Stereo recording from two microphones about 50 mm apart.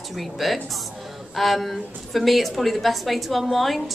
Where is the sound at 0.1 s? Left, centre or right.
Centre.